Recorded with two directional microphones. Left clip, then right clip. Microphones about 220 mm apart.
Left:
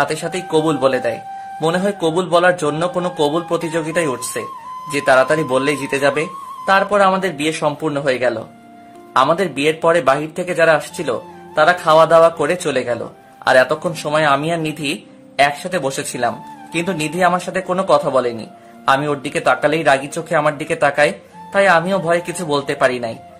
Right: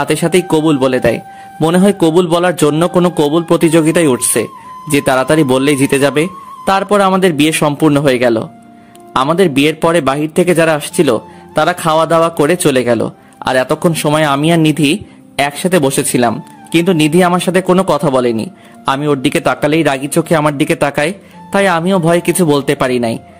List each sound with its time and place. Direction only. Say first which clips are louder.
0.0 s speech: right 7 dB; 35° right (ahead or behind)